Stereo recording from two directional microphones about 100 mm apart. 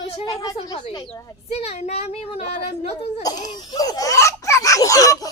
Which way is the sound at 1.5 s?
85° left.